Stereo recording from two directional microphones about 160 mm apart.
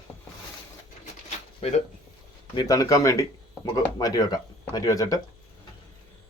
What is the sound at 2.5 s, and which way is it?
Speech, 20° left (ahead or behind).